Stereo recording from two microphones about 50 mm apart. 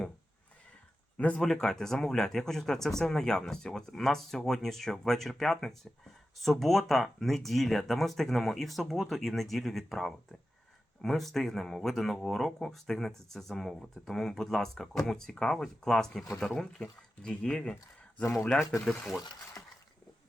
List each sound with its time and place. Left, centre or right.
1.1 s speech: left
1.4 s speech: centre
18.9 s speech: centre